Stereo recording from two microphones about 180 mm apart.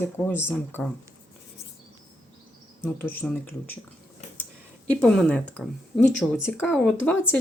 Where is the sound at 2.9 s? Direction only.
10° left (ahead or behind).